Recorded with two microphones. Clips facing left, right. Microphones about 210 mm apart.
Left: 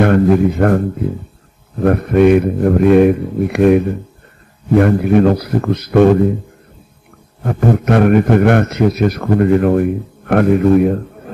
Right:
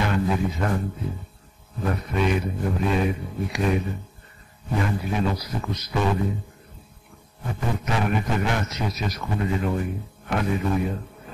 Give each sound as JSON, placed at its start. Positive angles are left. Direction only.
{"t": 0.0, "sound": "a man's voice", "side_deg": 55}
{"t": 7.4, "sound": "a man's voice", "side_deg": 60}